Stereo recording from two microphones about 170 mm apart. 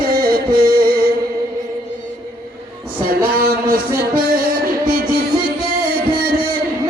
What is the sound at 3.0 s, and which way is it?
Music, 60° right (ahead or behind).